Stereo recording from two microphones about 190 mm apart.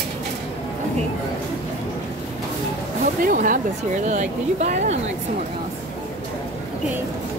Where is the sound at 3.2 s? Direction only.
45° right (ahead or behind).